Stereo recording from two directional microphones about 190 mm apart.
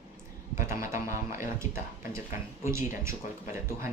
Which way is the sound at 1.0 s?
15° right (ahead or behind).